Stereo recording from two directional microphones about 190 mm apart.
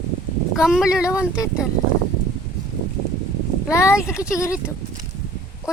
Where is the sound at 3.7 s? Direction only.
15° left (ahead or behind).